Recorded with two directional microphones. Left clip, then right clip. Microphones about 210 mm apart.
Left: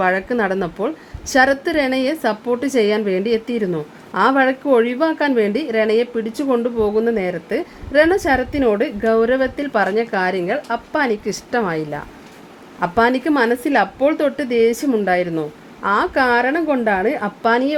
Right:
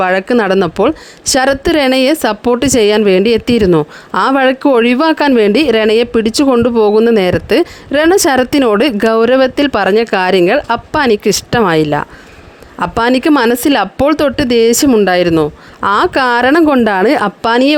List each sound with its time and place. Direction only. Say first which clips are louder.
0.0 s a woman's voice: right 6 dB; 40° right (ahead or behind)